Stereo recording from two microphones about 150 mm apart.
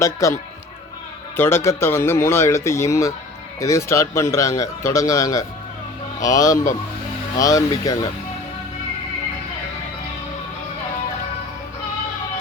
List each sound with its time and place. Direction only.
0.0 s a man's voice: 20° left (ahead or behind)
1.4 s a man's voice: 15° left (ahead or behind)